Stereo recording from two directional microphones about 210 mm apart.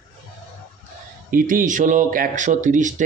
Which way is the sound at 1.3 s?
40° right (ahead or behind).